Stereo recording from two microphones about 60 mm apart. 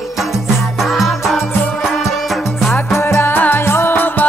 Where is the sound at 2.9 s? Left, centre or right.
Left.